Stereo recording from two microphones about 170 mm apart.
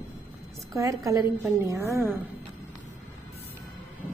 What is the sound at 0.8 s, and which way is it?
A woman's voice, 20° right (ahead or behind).